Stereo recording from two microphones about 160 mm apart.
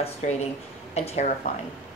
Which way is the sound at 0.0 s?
40° left (ahead or behind).